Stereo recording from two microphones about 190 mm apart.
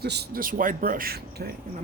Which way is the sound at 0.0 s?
60° right (ahead or behind).